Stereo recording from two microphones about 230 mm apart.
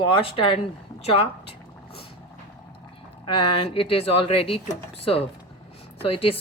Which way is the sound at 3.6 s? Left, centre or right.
Left.